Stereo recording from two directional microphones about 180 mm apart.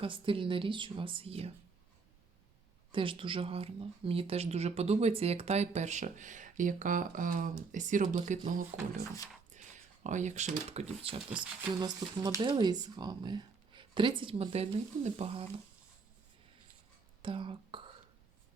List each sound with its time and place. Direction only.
0.0 s speech: 30° right (ahead or behind)
2.9 s speech: 30° right (ahead or behind)
11.3 s speech: 5° right (ahead or behind)
11.7 s speech: 25° right (ahead or behind)
17.2 s speech: 30° right (ahead or behind)